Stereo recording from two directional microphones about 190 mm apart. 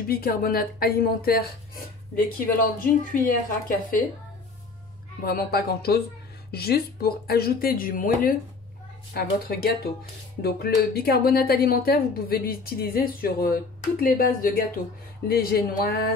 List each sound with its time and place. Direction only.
0.1 s speech: 50° left (ahead or behind)
5.2 s speech: 55° left (ahead or behind)